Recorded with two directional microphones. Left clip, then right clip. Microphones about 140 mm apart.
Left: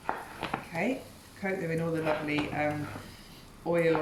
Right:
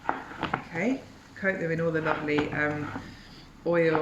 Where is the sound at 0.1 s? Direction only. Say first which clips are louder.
Right 4 dB; 20° right (ahead or behind).